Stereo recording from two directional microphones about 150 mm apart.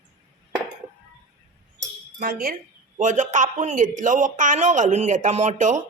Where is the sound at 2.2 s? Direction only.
70° right (ahead or behind).